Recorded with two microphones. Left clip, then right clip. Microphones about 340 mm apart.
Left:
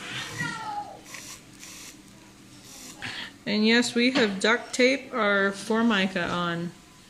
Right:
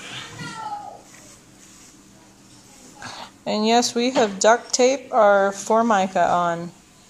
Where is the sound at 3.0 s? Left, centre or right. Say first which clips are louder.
Even; right.